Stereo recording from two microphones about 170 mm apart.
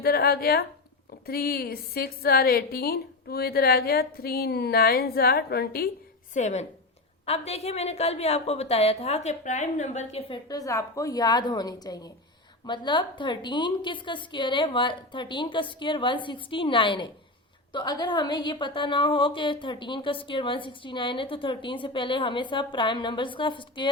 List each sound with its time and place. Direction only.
0.0 s a woman's voice: 65° left (ahead or behind)
6.3 s a woman's voice: 45° left (ahead or behind); by 23.9 s 30° left (ahead or behind)